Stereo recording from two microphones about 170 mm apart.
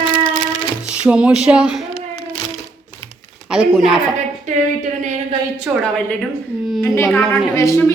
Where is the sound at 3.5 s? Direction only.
5° right (ahead or behind).